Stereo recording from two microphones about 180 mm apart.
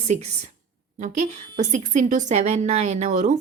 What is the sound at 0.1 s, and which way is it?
Speech, 40° right (ahead or behind).